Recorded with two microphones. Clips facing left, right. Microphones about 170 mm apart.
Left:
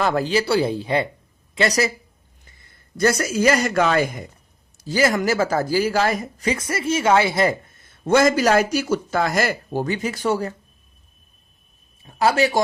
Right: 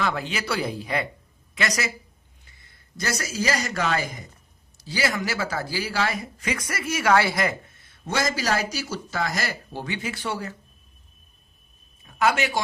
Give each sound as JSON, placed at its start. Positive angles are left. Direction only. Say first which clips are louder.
{"t": 0.0, "sound": "speech", "louder": "left 7 dB", "side_deg": 40}
{"t": 3.0, "sound": "speech", "louder": "left 10 dB", "side_deg": 55}
{"t": 4.8, "sound": "speech", "louder": "left 7 dB", "side_deg": 45}
{"t": 8.0, "sound": "speech", "louder": "left 10 dB", "side_deg": 55}
{"t": 12.0, "sound": "speech", "louder": "left 4 dB", "side_deg": 35}